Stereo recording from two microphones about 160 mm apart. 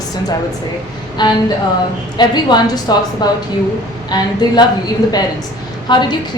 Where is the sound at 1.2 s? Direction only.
25° left (ahead or behind).